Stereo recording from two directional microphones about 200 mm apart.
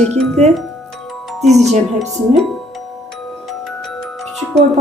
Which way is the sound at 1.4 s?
Centre (ahead or behind).